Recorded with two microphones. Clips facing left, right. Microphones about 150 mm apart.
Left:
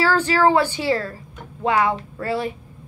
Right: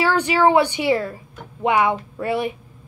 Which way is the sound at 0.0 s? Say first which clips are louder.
Even; 20° right (ahead or behind).